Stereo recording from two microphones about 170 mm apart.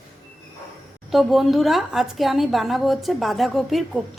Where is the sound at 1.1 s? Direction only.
Centre (ahead or behind).